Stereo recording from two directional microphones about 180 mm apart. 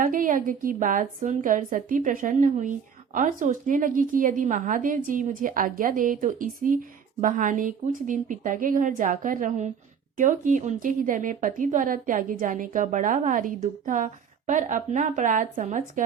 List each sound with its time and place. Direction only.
0.0 s a woman's voice: 50° right (ahead or behind)